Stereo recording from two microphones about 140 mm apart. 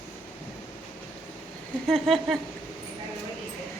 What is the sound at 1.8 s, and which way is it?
Speech, centre (ahead or behind).